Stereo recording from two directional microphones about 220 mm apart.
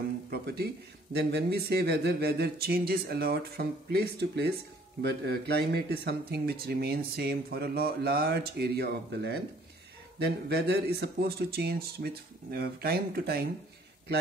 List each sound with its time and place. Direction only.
0.3 s speech: 45° right (ahead or behind)